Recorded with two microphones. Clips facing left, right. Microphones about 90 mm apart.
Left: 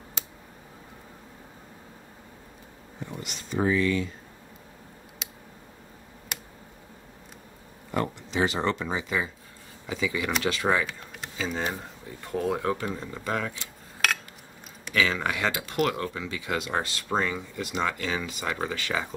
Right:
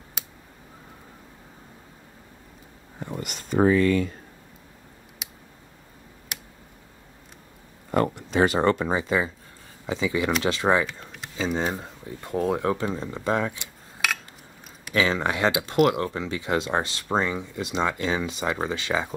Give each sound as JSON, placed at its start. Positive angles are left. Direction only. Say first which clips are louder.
{"t": 3.1, "sound": "speech", "louder": "right 6 dB", "side_deg": -50}
{"t": 7.9, "sound": "speech", "louder": "right 5 dB", "side_deg": -50}
{"t": 9.8, "sound": "speech", "louder": "right 4 dB", "side_deg": -25}
{"t": 10.9, "sound": "a sound", "louder": "even", "side_deg": 0}
{"t": 11.3, "sound": "speech", "louder": "right 4 dB", "side_deg": -20}
{"t": 15.0, "sound": "speech", "louder": "right 3 dB", "side_deg": -25}